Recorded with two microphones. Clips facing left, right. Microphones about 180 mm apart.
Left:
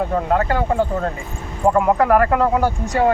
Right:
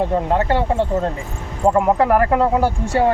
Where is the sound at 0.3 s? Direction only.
25° right (ahead or behind).